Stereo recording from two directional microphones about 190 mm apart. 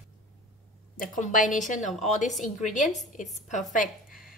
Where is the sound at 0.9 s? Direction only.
40° left (ahead or behind).